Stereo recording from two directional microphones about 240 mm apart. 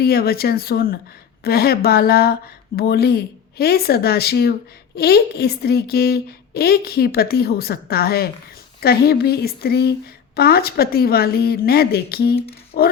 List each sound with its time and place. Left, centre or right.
0.0 s a woman's voice: left